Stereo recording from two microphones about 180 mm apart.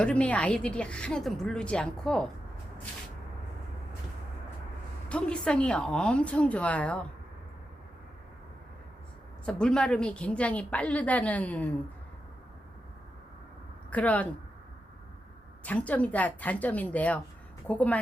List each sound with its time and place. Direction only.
0.0 s speech: 5° left (ahead or behind)
5.0 s a woman's voice: 5° left (ahead or behind)
9.5 s a woman's voice: 5° left (ahead or behind)
13.9 s a woman's voice: 10° left (ahead or behind)
15.6 s a woman's voice: 10° left (ahead or behind)